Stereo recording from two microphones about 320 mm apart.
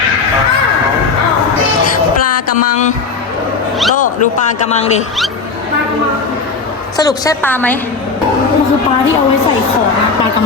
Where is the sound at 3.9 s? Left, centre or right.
Left.